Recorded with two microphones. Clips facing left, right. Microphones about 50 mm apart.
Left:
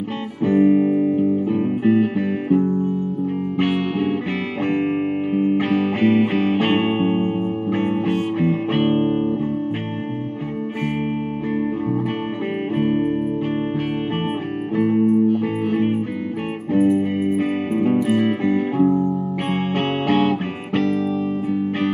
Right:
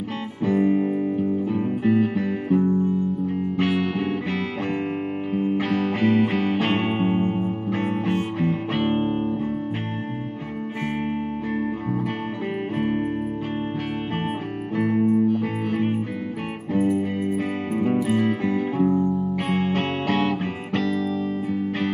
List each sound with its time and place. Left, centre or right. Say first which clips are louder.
0.5 s music: left 5 dB; left
3.7 s music: left 3 dB; left
5.3 s music: left 4 dB; centre
7.0 s music: left 3 dB; centre
7.3 s music: left 4 dB; left
15.0 s music: left 3 dB; centre
18.8 s music: left 3 dB; centre
19.7 s guitar: left 4 dB; centre